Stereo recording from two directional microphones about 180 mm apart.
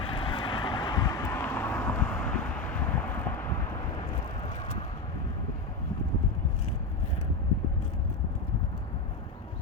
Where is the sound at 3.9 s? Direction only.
30° left (ahead or behind).